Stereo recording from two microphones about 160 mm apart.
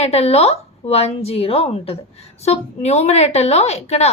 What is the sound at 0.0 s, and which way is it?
A woman's voice, 40° left (ahead or behind).